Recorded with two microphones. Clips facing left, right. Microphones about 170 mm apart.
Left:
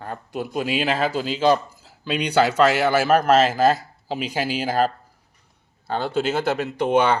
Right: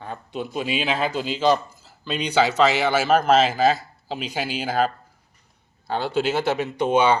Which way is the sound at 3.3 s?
40° left (ahead or behind).